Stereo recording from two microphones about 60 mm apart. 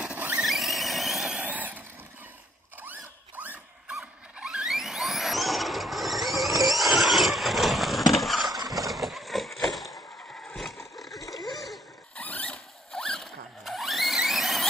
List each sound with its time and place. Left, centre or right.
0.0 s vehicle: right
0.4 s vehicle: centre
1.4 s vehicle: right
2.8 s zipper: right
4.0 s squeal: centre
8.1 s a sound: centre
8.8 s horse: centre
10.4 s vehicle: centre
11.5 s a sound: centre
12.2 s rodents: left
12.9 s zipper: centre
13.7 s a sound: centre